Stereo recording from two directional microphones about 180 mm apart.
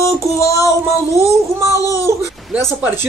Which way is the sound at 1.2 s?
15° right (ahead or behind).